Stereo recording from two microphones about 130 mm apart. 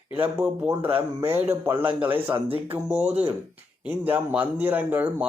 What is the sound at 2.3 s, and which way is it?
Speech, 45° right (ahead or behind).